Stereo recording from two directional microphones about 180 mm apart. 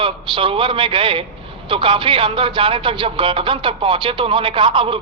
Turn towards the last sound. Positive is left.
turn(degrees=-30)  # may be behind; listen again after turning